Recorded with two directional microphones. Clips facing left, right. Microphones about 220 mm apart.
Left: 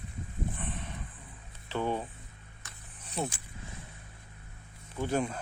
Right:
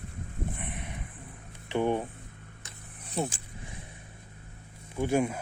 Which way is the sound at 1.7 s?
15° right (ahead or behind).